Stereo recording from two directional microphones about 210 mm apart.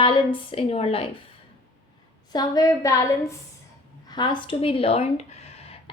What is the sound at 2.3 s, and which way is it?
A woman's voice, 15° left (ahead or behind).